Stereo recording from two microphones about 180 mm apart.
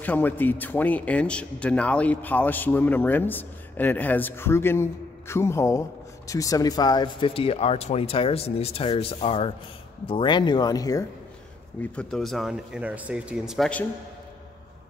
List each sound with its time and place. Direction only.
0.0 s a man's voice: 10° left (ahead or behind)
11.8 s speech: 5° left (ahead or behind)